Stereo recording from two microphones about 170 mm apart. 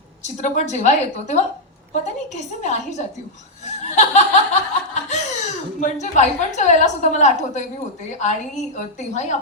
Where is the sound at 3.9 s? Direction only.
45° left (ahead or behind).